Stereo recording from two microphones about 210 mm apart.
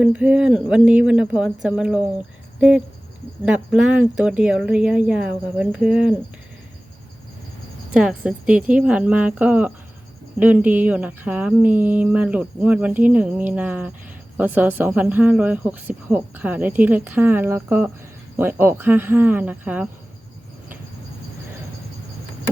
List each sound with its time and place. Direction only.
0.0 s speech: 5° right (ahead or behind)
7.9 s speech: 5° right (ahead or behind)